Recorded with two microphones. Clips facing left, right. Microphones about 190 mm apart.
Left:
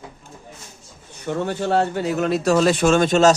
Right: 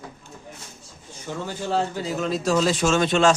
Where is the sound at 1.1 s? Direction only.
65° left (ahead or behind); by 3.3 s 40° left (ahead or behind).